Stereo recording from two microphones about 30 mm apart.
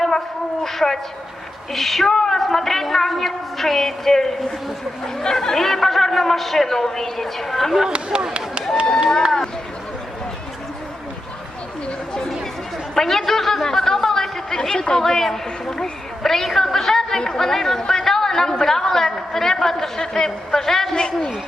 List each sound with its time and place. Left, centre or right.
0.6 s a sound: centre
1.7 s a woman's voice: centre
7.9 s speech: right
12.9 s chatter: centre
14.5 s chatter: left
15.0 s a woman's voice: centre
20.9 s a man's voice: left